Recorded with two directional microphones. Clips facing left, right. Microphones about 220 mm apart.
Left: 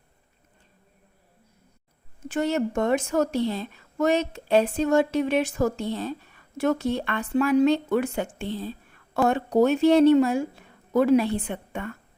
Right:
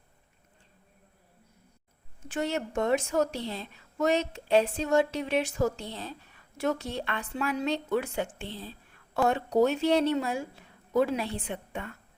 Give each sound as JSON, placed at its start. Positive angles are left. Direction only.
{"t": 2.7, "sound": "a woman's voice", "side_deg": 50}